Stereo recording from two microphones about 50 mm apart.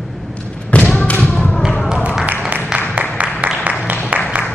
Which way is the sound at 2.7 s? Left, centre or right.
Right.